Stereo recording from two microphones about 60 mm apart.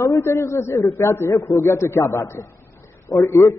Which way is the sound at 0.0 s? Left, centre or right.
Left.